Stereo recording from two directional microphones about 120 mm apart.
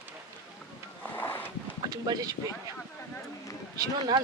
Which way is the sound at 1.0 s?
15° left (ahead or behind).